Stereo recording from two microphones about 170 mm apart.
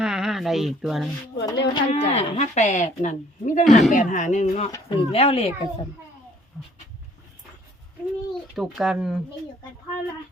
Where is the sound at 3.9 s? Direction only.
50° left (ahead or behind).